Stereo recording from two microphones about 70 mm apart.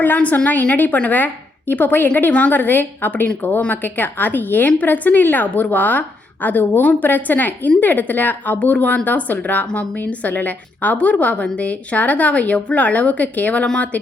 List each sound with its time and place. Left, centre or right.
0.0 s a woman's voice: left